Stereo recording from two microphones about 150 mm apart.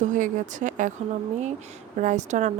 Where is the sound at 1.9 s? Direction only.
50° right (ahead or behind).